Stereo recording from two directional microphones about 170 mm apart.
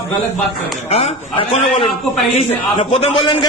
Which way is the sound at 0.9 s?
35° left (ahead or behind).